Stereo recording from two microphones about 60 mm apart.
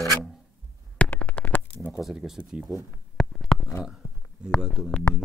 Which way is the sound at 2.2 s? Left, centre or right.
Centre.